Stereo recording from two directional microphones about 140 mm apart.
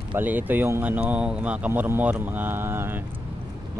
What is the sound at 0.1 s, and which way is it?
Speech, 10° right (ahead or behind).